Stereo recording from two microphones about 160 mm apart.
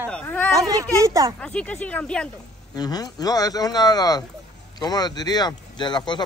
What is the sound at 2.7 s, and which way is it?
A man's voice, 25° left (ahead or behind).